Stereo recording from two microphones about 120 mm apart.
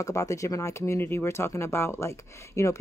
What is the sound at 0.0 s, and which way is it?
Speech, 25° left (ahead or behind).